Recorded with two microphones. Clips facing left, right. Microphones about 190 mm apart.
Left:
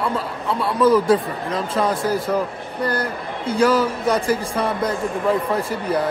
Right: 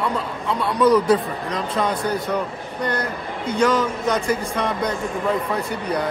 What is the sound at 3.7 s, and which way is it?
Speech, 10° left (ahead or behind).